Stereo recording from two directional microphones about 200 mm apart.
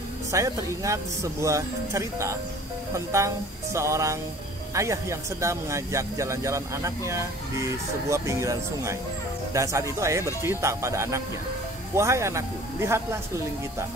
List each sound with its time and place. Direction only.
0.3 s speech: 15° right (ahead or behind)